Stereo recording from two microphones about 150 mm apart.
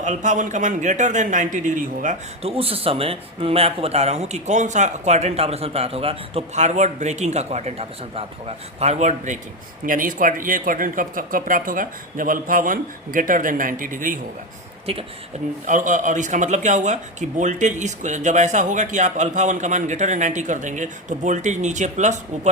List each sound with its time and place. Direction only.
0.0 s speech: 55° right (ahead or behind)
2.4 s speech: 40° right (ahead or behind)
9.8 s speech: 65° right (ahead or behind)
14.9 s speech: 40° right (ahead or behind)
15.6 s speech: 60° right (ahead or behind)